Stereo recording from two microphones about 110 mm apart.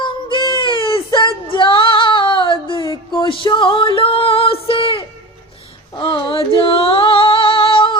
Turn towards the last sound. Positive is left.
turn(degrees=55)  # may be behind; listen again after turning